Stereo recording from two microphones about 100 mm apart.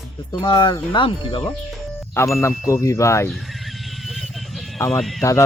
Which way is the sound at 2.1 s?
25° left (ahead or behind).